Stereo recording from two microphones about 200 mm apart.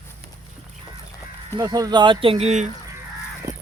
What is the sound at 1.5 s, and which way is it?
Speech, 20° right (ahead or behind).